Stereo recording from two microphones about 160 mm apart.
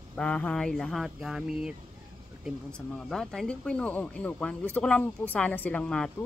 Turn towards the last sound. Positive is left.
turn(degrees=5)  # may be behind; listen again after turning